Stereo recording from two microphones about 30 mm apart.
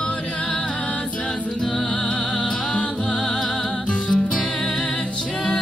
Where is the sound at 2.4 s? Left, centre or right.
Left.